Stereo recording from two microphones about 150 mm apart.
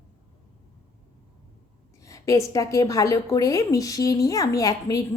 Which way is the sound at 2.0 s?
20° left (ahead or behind).